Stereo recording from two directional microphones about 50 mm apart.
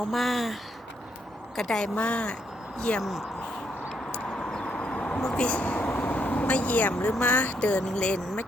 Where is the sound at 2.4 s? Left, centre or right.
Centre.